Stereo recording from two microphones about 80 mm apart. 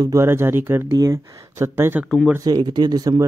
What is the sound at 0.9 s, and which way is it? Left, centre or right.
Speech, right.